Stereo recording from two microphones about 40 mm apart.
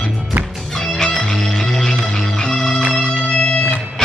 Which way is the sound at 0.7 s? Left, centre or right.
Centre.